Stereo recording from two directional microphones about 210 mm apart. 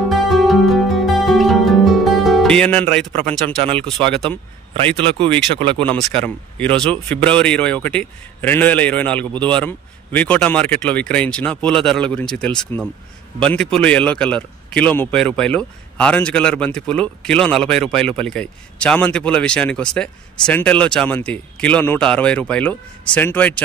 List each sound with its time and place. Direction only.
0.1 s music: centre (ahead or behind)
5.6 s speech: 25° right (ahead or behind)
5.9 s a man's voice: 5° left (ahead or behind)